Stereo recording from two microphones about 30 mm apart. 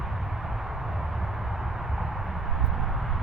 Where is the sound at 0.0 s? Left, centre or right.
Centre.